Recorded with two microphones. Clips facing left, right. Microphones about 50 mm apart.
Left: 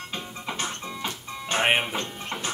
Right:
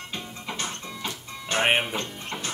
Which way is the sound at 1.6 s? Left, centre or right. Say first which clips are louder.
Even; centre.